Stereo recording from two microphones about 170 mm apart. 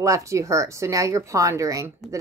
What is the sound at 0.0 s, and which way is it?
A woman's voice, 20° right (ahead or behind).